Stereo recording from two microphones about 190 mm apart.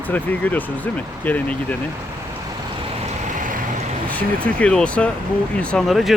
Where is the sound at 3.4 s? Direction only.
45° right (ahead or behind).